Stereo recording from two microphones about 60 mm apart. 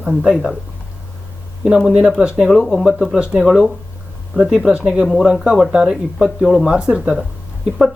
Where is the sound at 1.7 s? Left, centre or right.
Centre.